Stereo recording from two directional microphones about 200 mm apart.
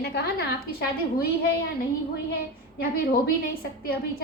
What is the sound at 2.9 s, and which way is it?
Speech, 50° left (ahead or behind).